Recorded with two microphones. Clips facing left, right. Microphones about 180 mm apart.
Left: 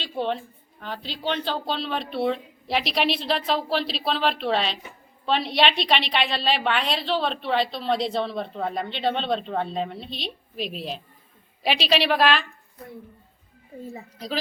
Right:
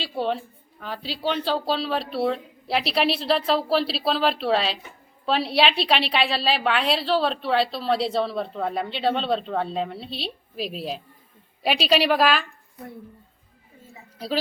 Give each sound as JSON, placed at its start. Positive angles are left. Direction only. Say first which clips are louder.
{"t": 0.0, "sound": "a woman's voice", "louder": "right 1 dB", "side_deg": -5}